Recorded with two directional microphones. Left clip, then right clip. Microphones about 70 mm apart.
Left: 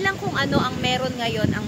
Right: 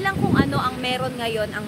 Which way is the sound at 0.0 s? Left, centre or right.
Right.